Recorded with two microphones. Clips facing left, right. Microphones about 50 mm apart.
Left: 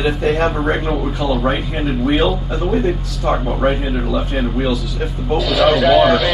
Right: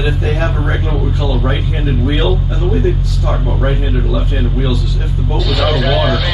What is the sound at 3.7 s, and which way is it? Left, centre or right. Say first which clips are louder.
A man's voice: even; centre.